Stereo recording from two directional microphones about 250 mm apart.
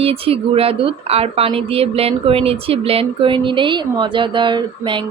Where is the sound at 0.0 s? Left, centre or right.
Right.